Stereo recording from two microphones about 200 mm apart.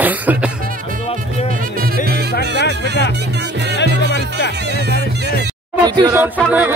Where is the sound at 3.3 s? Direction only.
55° right (ahead or behind).